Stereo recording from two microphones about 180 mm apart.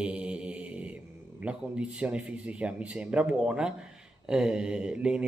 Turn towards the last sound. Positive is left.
turn(degrees=-5)  # may be behind; listen again after turning